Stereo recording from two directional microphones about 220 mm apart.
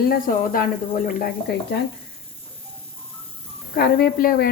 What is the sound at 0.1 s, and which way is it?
A woman's voice, 40° left (ahead or behind).